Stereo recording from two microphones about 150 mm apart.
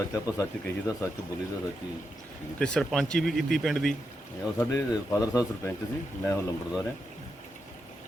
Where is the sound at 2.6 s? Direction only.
5° left (ahead or behind).